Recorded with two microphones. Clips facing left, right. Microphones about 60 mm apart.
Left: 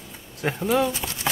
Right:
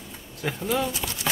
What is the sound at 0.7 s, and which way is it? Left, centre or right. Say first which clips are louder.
Speech: left 4 dB; left.